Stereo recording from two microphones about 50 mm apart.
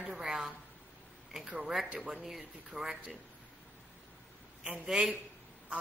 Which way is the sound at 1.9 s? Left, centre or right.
Right.